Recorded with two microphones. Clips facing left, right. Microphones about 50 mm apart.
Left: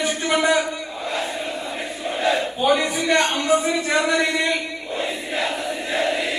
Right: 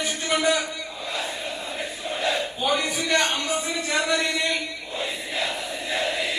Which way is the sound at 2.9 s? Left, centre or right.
Left.